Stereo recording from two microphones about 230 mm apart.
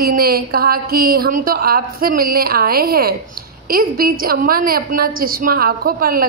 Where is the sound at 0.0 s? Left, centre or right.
Right.